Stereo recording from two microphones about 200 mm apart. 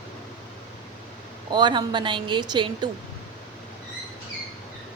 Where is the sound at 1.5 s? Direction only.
20° right (ahead or behind).